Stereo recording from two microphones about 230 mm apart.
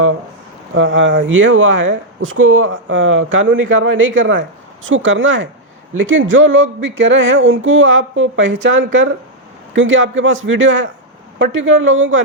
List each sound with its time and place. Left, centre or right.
0.7 s speech: right